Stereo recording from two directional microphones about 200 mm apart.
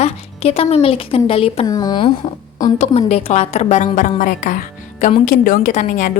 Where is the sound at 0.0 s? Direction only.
30° left (ahead or behind).